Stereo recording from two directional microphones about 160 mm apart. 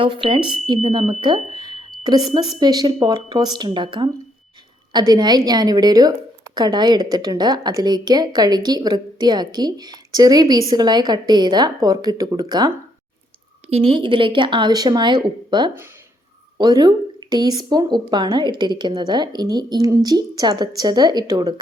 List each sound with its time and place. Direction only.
0.0 s a woman's voice: 35° right (ahead or behind)
13.7 s a woman's voice: 40° right (ahead or behind)